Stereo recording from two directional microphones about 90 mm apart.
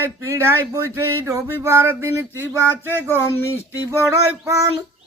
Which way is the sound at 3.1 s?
30° left (ahead or behind).